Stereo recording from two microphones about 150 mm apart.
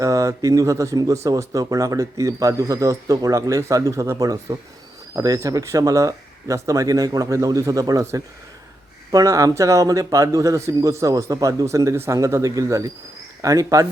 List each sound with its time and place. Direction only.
0.0 s speech: 20° right (ahead or behind)